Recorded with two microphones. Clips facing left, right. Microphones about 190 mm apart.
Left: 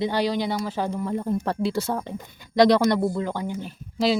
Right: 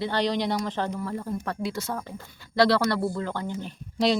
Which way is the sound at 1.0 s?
20° left (ahead or behind).